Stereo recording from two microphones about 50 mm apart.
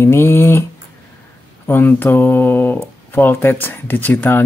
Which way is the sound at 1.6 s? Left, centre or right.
Left.